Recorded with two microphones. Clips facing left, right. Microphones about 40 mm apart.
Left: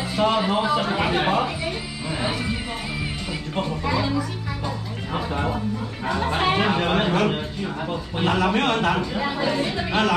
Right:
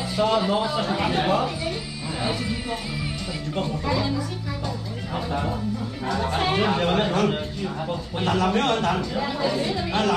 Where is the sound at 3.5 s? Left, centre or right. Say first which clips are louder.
Left 1 dB; centre.